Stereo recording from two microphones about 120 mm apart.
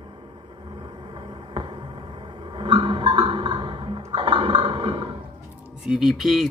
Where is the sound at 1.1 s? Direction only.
45° right (ahead or behind).